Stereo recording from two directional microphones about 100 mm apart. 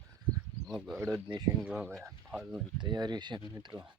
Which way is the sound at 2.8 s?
45° right (ahead or behind).